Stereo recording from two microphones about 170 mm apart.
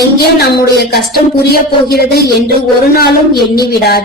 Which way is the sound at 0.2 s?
65° left (ahead or behind).